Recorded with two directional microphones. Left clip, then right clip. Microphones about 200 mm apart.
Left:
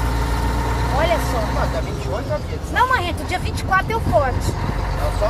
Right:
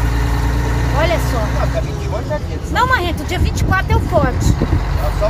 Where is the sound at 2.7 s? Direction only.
20° right (ahead or behind).